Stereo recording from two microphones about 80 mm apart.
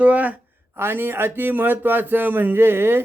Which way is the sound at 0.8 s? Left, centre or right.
Right.